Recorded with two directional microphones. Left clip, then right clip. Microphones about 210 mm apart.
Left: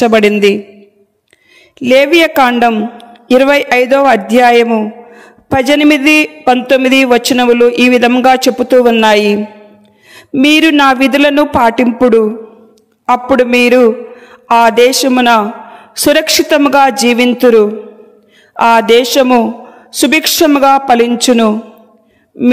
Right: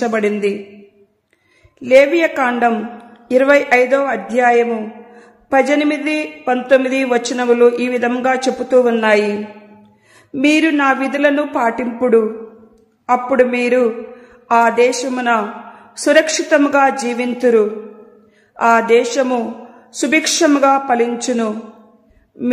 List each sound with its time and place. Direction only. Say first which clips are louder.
0.0 s a woman's voice: left 9 dB; 40° left (ahead or behind)
1.8 s a woman's voice: left 4 dB; 45° left (ahead or behind)